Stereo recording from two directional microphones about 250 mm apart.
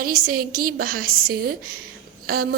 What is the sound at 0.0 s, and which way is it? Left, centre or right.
A woman's voice, right.